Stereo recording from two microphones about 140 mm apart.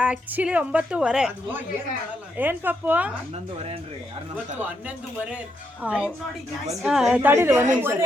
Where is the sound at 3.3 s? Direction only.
45° right (ahead or behind).